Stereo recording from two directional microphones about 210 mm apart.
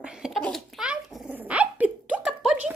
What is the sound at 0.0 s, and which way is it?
Dog, 5° right (ahead or behind).